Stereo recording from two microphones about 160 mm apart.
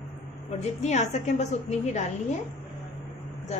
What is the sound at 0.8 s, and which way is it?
A woman's voice, 45° left (ahead or behind).